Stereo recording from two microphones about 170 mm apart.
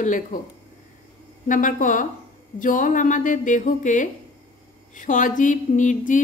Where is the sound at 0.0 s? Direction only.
50° left (ahead or behind).